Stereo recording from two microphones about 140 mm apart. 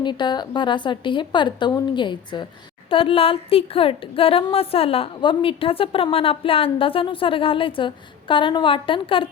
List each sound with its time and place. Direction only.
0.0 s a woman's voice: 35° left (ahead or behind)